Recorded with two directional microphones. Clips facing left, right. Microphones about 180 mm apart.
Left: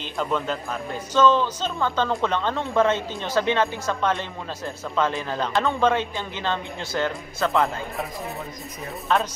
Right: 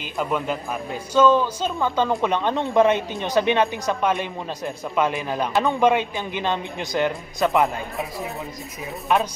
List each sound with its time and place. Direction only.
0.0 s speech: 10° right (ahead or behind)
9.1 s speech: 15° right (ahead or behind)